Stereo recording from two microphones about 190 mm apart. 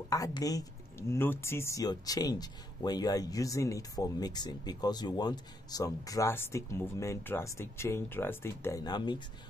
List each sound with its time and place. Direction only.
0.1 s speech: 20° left (ahead or behind)